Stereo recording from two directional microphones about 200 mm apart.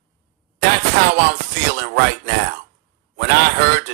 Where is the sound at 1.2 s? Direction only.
55° right (ahead or behind).